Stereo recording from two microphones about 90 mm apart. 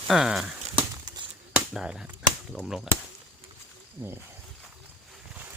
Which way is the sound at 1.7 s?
10° right (ahead or behind).